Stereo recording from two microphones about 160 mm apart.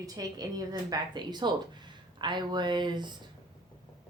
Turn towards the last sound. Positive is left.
turn(degrees=-30)  # may be behind; listen again after turning